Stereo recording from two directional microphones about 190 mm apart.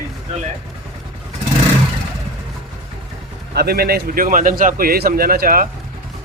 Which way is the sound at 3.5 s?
55° right (ahead or behind).